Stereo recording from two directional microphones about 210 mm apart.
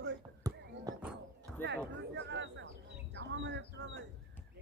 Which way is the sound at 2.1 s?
60° right (ahead or behind).